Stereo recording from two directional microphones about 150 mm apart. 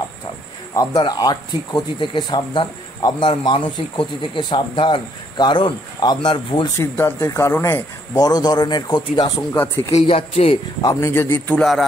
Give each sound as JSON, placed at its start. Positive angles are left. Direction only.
{"t": 0.7, "sound": "speech", "side_deg": 25}
{"t": 6.8, "sound": "speech", "side_deg": 15}
{"t": 9.6, "sound": "a man's voice", "side_deg": 15}
{"t": 9.9, "sound": "speech", "side_deg": 45}
{"t": 10.8, "sound": "a man's voice", "side_deg": 20}